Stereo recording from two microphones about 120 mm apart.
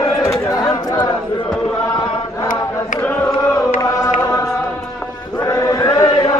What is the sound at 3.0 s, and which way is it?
Chant, 15° left (ahead or behind).